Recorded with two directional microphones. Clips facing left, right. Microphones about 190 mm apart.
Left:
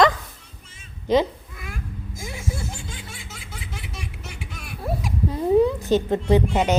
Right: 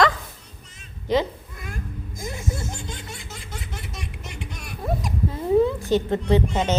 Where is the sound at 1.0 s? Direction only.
20° left (ahead or behind).